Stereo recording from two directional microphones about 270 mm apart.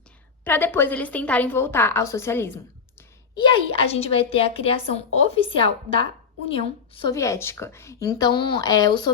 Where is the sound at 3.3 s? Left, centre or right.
Centre.